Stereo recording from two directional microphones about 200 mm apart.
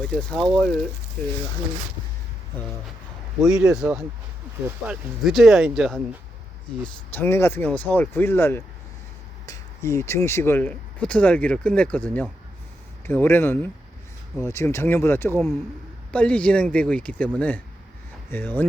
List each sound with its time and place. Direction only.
0.2 s speech: 5° left (ahead or behind)
3.5 s speech: 15° right (ahead or behind)
6.8 s speech: 10° left (ahead or behind)